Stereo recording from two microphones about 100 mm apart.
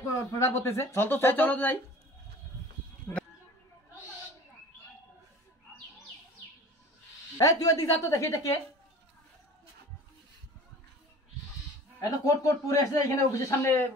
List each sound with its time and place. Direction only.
0.0 s speech: 30° left (ahead or behind)
3.1 s speech: 25° left (ahead or behind)
7.3 s a man's voice: 35° left (ahead or behind)
12.0 s a man's voice: 35° left (ahead or behind)